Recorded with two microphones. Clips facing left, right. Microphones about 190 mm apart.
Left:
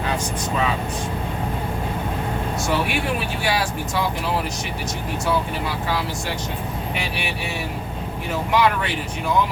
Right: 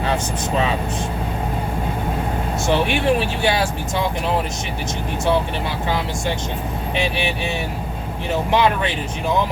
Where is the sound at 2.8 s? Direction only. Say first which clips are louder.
Right 6 dB; 25° right (ahead or behind).